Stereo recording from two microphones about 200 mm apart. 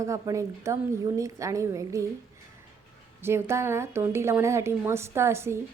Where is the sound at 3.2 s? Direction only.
15° right (ahead or behind).